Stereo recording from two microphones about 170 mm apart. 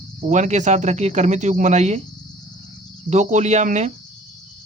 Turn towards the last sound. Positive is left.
turn(degrees=-40)  # may be behind; listen again after turning